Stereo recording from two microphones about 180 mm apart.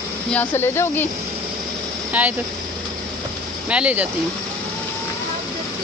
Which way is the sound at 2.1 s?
10° right (ahead or behind).